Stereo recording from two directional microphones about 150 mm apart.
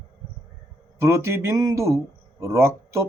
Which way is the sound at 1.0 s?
20° right (ahead or behind).